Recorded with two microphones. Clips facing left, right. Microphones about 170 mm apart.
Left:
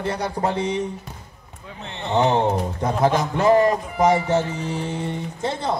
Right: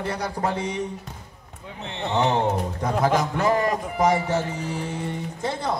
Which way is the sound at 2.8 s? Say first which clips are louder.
Left 2 dB; 25° left (ahead or behind).